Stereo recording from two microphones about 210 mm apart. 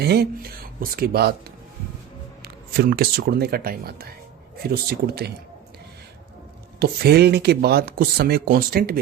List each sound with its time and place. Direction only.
0.0 s speech: 50° right (ahead or behind)
2.4 s speech: 50° right (ahead or behind)
6.7 s speech: 50° right (ahead or behind)